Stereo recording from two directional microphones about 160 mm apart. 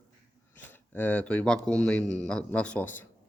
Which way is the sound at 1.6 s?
5° left (ahead or behind).